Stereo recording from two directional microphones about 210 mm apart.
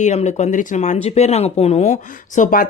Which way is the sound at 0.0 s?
35° left (ahead or behind).